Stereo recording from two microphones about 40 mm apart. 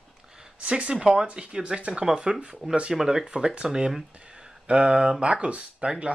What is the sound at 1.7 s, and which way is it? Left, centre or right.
Speech, right.